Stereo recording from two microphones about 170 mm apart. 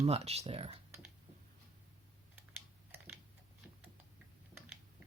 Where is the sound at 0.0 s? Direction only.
35° right (ahead or behind).